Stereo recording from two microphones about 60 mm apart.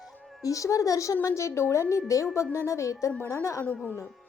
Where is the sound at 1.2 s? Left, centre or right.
Left.